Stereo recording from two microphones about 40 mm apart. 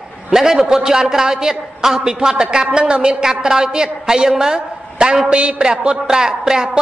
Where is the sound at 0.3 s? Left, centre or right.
Centre.